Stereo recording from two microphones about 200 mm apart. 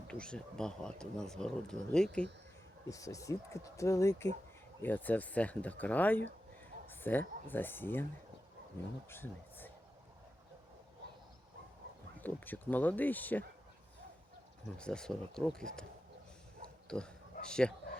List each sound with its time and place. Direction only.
0.1 s speech: 5° left (ahead or behind)
2.9 s speech: 15° left (ahead or behind)
9.0 s speech: 10° left (ahead or behind)
12.2 s speech: 10° left (ahead or behind)
14.8 s speech: 5° left (ahead or behind)
17.4 s speech: 5° left (ahead or behind)